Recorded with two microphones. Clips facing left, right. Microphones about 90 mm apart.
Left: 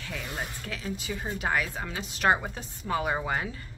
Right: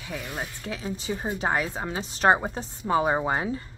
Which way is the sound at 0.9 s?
30° right (ahead or behind).